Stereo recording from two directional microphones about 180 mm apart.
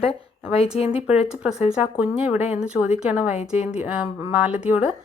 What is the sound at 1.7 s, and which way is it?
Speech, 5° right (ahead or behind).